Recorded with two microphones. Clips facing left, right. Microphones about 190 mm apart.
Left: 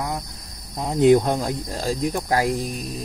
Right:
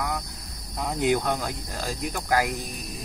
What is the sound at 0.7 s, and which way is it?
Cricket, 25° left (ahead or behind).